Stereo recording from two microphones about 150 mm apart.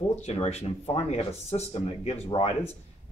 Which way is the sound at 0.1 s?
45° left (ahead or behind).